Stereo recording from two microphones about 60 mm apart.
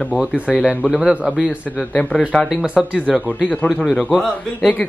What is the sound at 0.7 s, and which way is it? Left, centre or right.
Speech, left.